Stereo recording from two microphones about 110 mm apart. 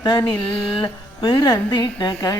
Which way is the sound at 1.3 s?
35° left (ahead or behind).